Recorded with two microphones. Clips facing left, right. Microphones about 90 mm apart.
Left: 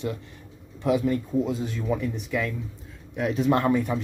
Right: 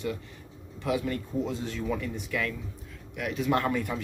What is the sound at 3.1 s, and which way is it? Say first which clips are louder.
Speech: left 5 dB; 30° left (ahead or behind).